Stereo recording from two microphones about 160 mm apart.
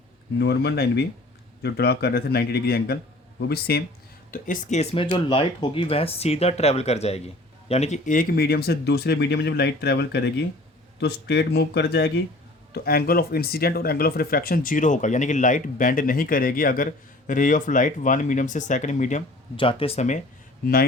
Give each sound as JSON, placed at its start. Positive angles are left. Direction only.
{"t": 0.3, "sound": "a man's voice", "side_deg": 90}
{"t": 4.3, "sound": "speech", "side_deg": 55}
{"t": 5.1, "sound": "speech", "side_deg": 35}
{"t": 12.7, "sound": "speech", "side_deg": 75}
{"t": 19.5, "sound": "speech", "side_deg": 35}